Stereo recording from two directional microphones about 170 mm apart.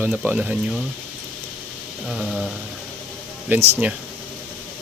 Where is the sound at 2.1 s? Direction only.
5° right (ahead or behind).